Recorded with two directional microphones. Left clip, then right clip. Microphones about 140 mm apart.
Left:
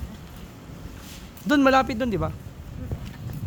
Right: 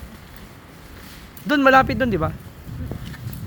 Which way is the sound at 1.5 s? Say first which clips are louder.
Right 4 dB; 10° left (ahead or behind).